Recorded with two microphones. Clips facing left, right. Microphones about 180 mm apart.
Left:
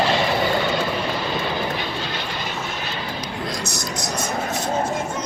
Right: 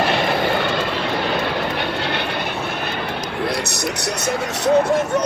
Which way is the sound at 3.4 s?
65° right (ahead or behind).